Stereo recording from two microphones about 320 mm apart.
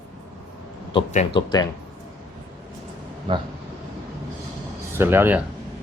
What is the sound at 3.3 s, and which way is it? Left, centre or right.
Speech, centre.